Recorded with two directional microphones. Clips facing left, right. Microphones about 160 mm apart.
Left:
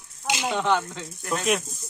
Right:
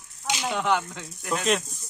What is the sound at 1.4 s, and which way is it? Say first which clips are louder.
Speech: even; 10° left (ahead or behind).